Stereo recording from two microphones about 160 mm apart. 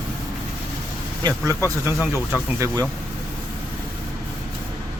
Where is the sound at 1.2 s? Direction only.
25° right (ahead or behind).